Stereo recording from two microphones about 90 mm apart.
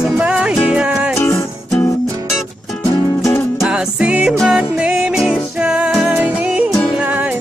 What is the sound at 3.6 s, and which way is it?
Music, 10° right (ahead or behind).